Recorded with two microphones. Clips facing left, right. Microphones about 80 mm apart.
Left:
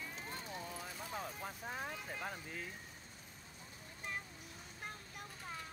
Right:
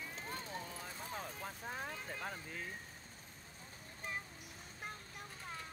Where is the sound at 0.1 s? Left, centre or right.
Right.